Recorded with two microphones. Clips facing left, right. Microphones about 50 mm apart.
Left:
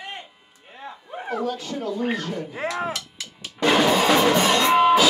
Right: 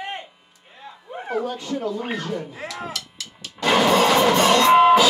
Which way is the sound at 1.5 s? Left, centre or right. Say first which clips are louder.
Right 3 dB; centre.